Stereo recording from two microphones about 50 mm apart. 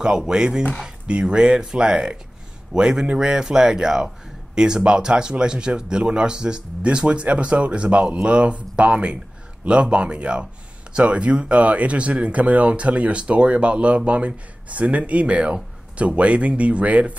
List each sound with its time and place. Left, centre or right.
0.3 s speech: centre